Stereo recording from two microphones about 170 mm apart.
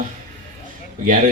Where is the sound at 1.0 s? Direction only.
50° right (ahead or behind).